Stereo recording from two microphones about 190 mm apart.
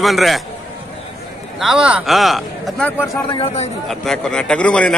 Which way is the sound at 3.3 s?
30° left (ahead or behind).